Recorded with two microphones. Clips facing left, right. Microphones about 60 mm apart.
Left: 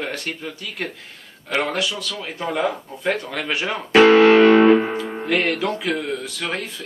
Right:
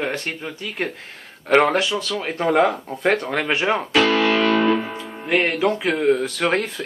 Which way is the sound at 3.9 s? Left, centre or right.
Left.